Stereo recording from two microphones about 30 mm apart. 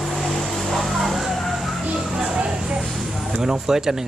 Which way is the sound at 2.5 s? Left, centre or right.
Right.